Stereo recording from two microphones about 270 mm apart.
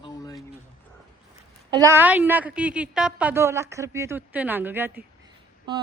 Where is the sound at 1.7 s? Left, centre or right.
Centre.